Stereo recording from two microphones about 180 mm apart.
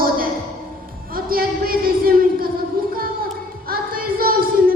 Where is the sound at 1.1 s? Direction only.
55° right (ahead or behind).